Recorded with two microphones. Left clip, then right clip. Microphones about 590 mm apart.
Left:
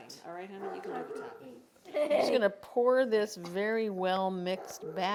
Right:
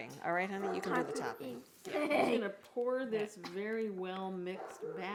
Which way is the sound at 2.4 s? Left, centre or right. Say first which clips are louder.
Left 9 dB; left.